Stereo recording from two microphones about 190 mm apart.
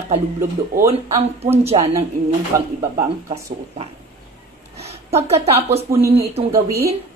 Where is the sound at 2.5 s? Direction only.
15° right (ahead or behind).